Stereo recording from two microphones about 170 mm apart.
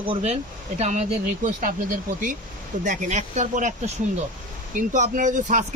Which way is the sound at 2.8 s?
45° right (ahead or behind).